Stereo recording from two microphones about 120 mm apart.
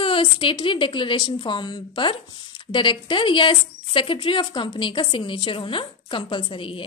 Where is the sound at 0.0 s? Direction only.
45° left (ahead or behind).